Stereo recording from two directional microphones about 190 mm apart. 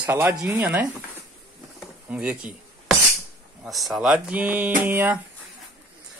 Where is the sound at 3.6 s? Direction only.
Centre (ahead or behind).